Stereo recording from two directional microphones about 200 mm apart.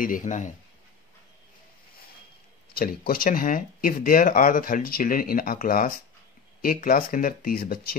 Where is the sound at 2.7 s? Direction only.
50° left (ahead or behind).